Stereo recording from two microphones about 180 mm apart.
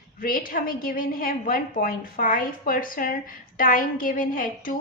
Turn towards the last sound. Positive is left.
turn(degrees=50)  # may be behind; listen again after turning